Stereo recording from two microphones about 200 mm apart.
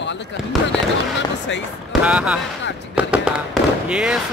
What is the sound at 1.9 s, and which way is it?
Speech, 5° right (ahead or behind).